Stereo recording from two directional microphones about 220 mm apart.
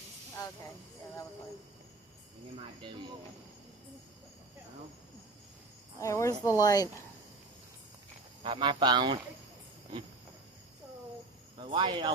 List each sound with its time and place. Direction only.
6.0 s speech: 15° left (ahead or behind)
8.4 s speech: 20° right (ahead or behind)
11.5 s speech: 20° right (ahead or behind)